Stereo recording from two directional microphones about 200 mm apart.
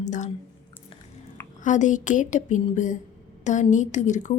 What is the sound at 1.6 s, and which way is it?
A woman's voice, 40° left (ahead or behind).